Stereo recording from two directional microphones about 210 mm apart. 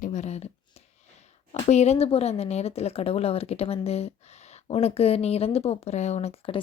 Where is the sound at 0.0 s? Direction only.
35° left (ahead or behind).